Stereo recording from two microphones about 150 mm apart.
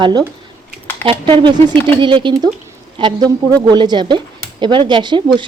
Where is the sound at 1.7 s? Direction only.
15° left (ahead or behind).